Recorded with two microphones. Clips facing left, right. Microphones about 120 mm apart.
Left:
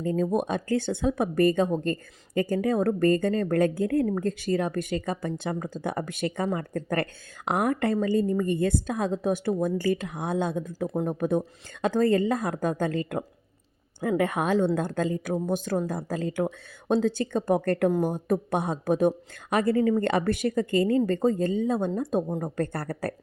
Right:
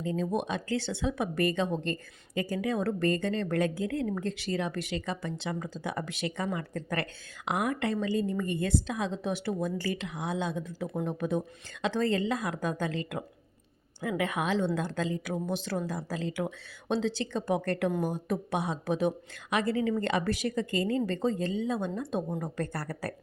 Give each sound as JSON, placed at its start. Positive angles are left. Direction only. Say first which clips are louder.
{"t": 0.0, "sound": "a woman's voice", "louder": "left 5 dB", "side_deg": 50}
{"t": 22.3, "sound": "speech", "louder": "left 4 dB", "side_deg": 30}
{"t": 22.5, "sound": "a woman's voice", "louder": "left 5 dB", "side_deg": 55}